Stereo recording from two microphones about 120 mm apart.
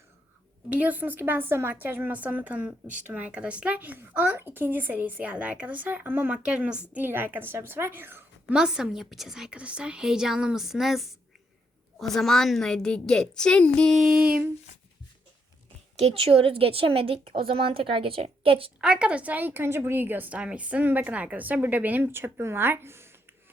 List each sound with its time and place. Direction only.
0.7 s speech: 15° right (ahead or behind)
8.5 s a woman's voice: 5° right (ahead or behind)
14.0 s speech: 5° right (ahead or behind)
16.0 s speech: 55° right (ahead or behind)
18.8 s speech: 10° right (ahead or behind)